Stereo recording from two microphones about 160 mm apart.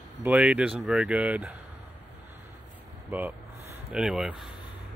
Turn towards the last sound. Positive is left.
turn(degrees=-5)  # may be behind; listen again after turning